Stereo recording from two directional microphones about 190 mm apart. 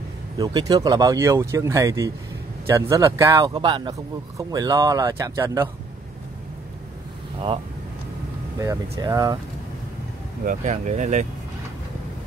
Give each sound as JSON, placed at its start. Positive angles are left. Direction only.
{"t": 0.4, "sound": "speech", "side_deg": -20}
{"t": 9.0, "sound": "speech", "side_deg": -20}
{"t": 10.4, "sound": "speech", "side_deg": -40}